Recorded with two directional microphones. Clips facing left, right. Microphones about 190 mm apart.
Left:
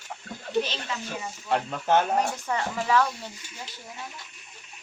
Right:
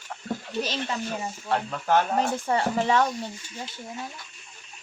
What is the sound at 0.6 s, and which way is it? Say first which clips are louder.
Speech: right 4 dB; 40° right (ahead or behind).